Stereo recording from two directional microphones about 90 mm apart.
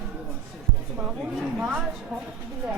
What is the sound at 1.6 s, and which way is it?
Speech, 10° right (ahead or behind).